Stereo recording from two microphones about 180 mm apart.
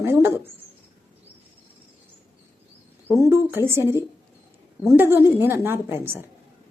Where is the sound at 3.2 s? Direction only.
15° right (ahead or behind).